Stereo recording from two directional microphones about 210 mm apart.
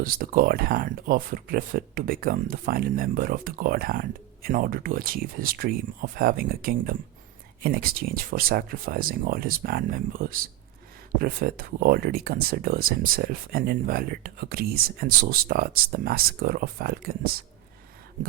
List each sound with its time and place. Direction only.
0.0 s speech: 40° right (ahead or behind)